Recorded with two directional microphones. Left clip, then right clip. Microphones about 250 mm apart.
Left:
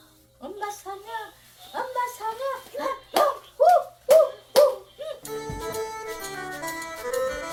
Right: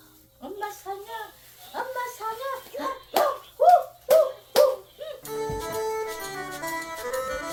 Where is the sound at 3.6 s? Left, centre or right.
Centre.